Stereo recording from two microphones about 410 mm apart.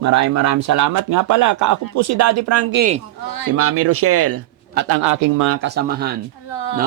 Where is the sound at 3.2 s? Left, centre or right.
Left.